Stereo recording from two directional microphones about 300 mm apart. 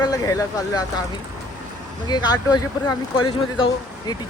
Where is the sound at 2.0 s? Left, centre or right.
Centre.